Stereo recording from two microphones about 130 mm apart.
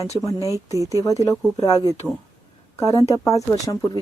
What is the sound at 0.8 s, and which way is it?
Speech, 25° left (ahead or behind).